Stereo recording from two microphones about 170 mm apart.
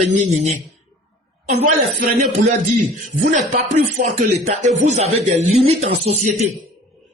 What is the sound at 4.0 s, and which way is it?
A man's voice, 45° right (ahead or behind).